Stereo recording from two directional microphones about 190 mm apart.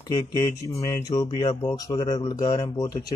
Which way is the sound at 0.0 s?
20° left (ahead or behind).